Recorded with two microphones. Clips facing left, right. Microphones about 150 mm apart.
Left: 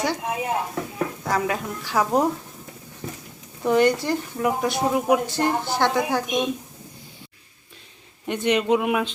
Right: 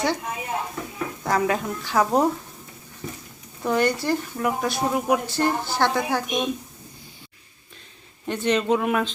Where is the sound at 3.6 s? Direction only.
20° left (ahead or behind).